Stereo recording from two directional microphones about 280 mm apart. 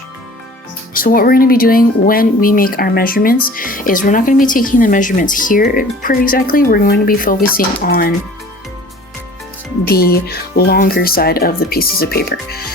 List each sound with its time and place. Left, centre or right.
0.9 s speech: left
9.8 s speech: left